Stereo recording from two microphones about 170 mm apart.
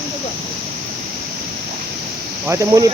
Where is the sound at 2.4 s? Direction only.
20° right (ahead or behind).